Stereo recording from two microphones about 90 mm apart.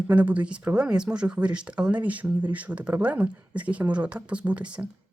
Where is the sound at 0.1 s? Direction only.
20° right (ahead or behind).